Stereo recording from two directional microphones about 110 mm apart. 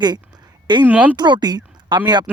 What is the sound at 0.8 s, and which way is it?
Speech, 15° right (ahead or behind).